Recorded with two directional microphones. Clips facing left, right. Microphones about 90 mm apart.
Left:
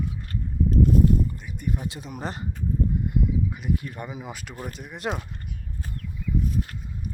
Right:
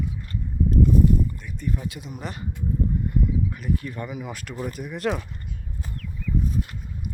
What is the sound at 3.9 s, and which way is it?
Speech, 20° left (ahead or behind).